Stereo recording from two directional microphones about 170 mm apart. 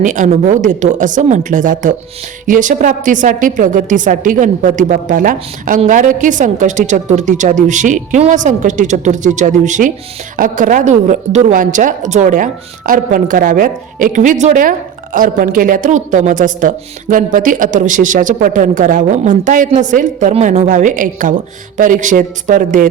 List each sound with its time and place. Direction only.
0.0 s speech: 45° right (ahead or behind)